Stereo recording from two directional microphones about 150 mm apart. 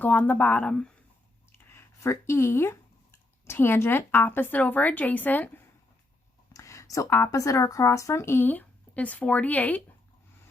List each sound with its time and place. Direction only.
0.0 s speech: 10° left (ahead or behind)